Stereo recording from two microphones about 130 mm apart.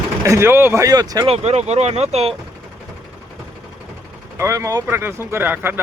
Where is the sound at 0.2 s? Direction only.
20° right (ahead or behind).